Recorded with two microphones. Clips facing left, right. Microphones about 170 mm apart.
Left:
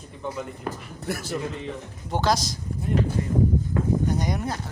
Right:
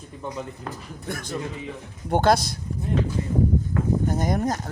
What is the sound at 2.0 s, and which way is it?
Speech, 55° right (ahead or behind).